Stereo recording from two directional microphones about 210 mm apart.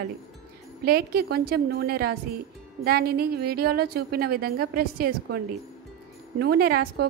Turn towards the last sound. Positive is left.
turn(degrees=-45)  # may be behind; listen again after turning